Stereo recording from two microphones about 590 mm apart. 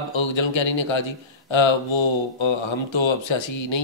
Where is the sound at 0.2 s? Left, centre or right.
Left.